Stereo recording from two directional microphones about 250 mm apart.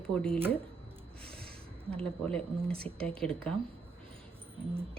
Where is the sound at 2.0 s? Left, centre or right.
Centre.